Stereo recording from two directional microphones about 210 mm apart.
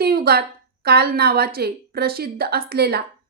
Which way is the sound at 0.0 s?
45° right (ahead or behind).